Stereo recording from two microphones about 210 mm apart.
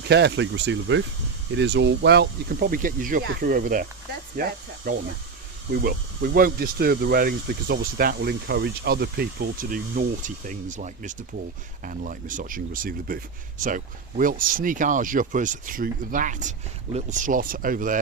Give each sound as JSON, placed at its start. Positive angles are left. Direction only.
{"t": 0.1, "sound": "speech", "side_deg": -55}